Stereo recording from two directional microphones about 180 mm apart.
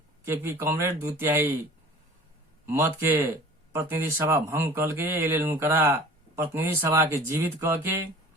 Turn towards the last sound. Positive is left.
turn(degrees=-15)  # may be behind; listen again after turning